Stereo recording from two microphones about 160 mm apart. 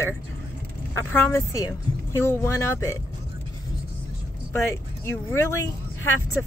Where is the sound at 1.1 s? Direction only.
15° left (ahead or behind).